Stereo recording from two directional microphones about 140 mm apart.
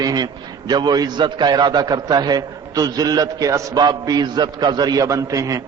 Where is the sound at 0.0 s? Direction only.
30° right (ahead or behind).